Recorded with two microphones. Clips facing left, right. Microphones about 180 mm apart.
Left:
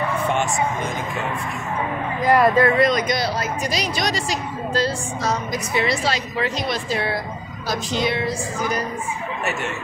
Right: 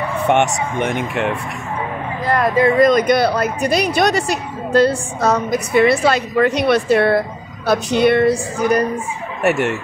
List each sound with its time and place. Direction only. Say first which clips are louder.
0.3 s speech: right 9 dB; 70° right (ahead or behind)
2.2 s speech: left 2 dB; 10° left (ahead or behind)
2.8 s speech: right 7 dB; 55° right (ahead or behind)
9.4 s fowl: right 12 dB; 65° right (ahead or behind)